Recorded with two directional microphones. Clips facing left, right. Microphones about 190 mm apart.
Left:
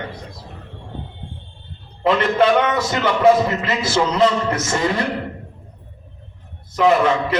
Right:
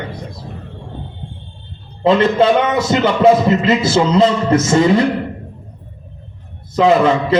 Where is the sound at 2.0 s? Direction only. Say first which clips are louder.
Right 4 dB; 25° right (ahead or behind).